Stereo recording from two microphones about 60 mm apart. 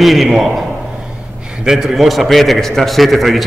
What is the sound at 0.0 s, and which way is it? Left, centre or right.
A man's voice, centre.